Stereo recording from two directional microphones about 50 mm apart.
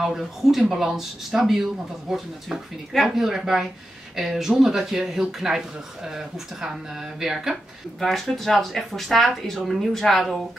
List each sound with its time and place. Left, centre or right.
0.2 s speech: centre
8.0 s speech: centre